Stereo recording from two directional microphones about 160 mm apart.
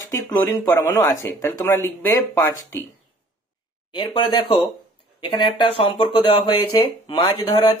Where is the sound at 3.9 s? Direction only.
30° left (ahead or behind).